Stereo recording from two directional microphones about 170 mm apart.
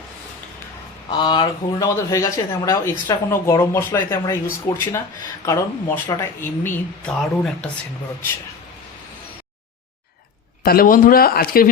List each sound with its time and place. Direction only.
1.2 s speech: 25° left (ahead or behind); by 7.7 s 5° left (ahead or behind)
10.6 s speech: 60° left (ahead or behind)